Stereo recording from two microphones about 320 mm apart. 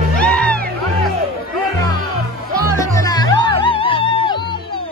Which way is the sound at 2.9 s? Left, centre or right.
Centre.